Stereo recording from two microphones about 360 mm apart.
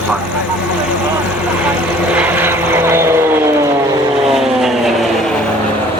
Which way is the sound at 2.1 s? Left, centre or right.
Centre.